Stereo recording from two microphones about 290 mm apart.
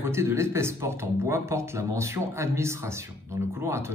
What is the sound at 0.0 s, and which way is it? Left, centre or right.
Speech, centre.